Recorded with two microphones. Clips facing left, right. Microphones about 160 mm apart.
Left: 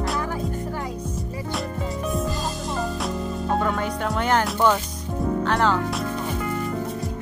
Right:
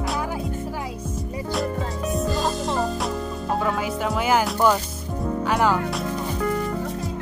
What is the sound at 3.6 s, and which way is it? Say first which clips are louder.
Music: even; 5° right (ahead or behind).